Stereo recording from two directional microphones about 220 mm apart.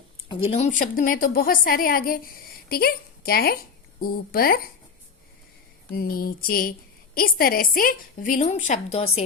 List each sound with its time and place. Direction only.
0.3 s a woman's voice: 25° left (ahead or behind); by 4.6 s 40° left (ahead or behind)
5.9 s a woman's voice: 45° left (ahead or behind)